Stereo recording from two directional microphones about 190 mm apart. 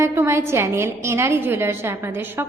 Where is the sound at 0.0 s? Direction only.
15° right (ahead or behind).